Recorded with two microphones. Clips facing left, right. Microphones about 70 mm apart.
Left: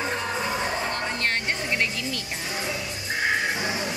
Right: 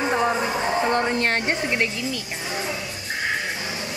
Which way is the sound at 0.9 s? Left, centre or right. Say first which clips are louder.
Right 6 dB; right.